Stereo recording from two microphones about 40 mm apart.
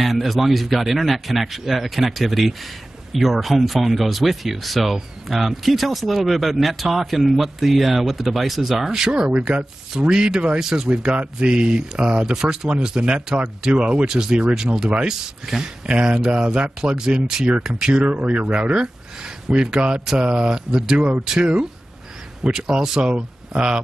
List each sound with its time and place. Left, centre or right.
0.0 s a man's voice: centre
11.1 s speech: right
14.0 s a man's voice: centre
14.7 s speech: right
15.0 s a man's voice: centre
18.0 s speech: right
22.5 s speech: centre